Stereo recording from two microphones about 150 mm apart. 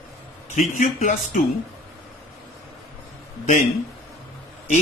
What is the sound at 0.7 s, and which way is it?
Speech, 55° left (ahead or behind).